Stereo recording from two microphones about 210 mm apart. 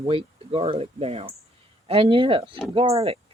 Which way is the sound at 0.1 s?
25° right (ahead or behind).